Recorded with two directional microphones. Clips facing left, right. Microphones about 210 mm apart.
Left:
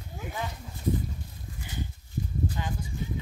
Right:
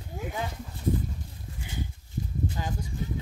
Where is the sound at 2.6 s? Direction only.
35° right (ahead or behind).